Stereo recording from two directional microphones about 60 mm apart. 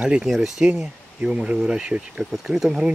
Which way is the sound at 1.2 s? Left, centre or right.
Centre.